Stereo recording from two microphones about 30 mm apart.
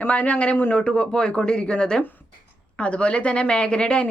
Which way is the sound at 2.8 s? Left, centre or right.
Left.